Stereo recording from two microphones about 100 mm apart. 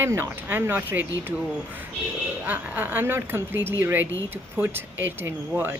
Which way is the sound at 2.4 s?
15° right (ahead or behind).